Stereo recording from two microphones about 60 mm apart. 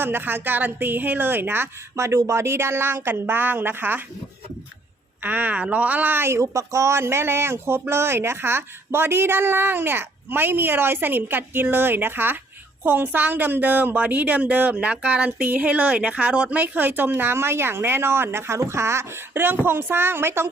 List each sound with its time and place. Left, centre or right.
0.0 s speech: right
2.0 s speech: right
5.2 s speech: right